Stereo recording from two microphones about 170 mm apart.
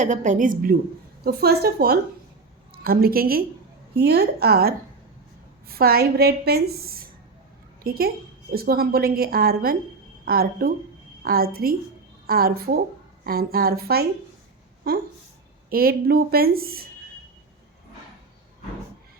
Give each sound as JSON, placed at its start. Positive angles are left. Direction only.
{"t": 0.0, "sound": "a woman's voice", "side_deg": -45}
{"t": 15.7, "sound": "a woman's voice", "side_deg": -60}